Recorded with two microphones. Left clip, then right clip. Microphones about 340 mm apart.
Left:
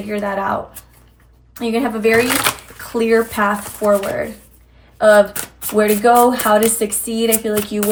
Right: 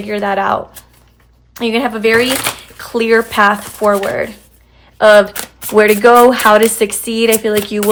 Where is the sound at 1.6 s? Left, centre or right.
Centre.